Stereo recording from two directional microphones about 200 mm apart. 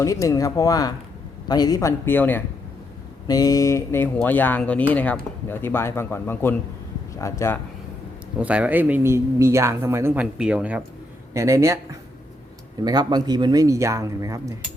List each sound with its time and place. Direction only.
0.0 s speech: 15° left (ahead or behind)
8.4 s speech: 5° right (ahead or behind)
12.8 s speech: 20° right (ahead or behind)